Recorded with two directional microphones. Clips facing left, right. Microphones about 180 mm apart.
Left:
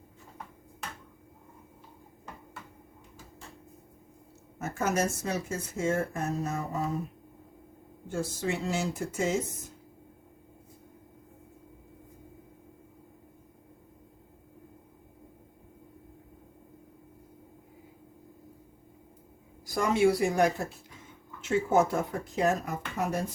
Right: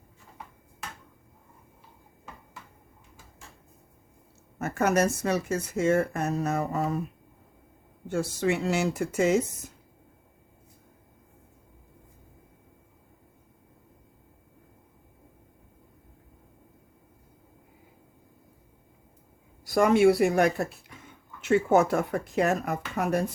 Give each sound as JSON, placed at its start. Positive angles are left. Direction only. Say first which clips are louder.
{"t": 4.6, "sound": "speech", "louder": "right 5 dB", "side_deg": -65}
{"t": 8.0, "sound": "speech", "louder": "right 5 dB", "side_deg": -70}
{"t": 19.6, "sound": "speech", "louder": "right 5 dB", "side_deg": -65}